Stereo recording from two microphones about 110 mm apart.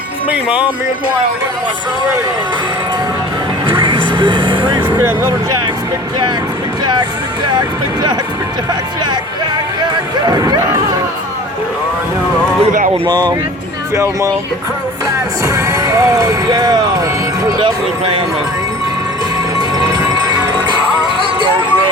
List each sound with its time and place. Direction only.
0.3 s speech: 10° right (ahead or behind)
3.7 s music: 50° right (ahead or behind)
4.9 s speech: 20° right (ahead or behind)
10.2 s speech: 35° right (ahead or behind)
12.9 s speech: 40° right (ahead or behind)
13.9 s speech: 25° right (ahead or behind)
15.4 s speech: 25° right (ahead or behind)
19.9 s music: 35° right (ahead or behind)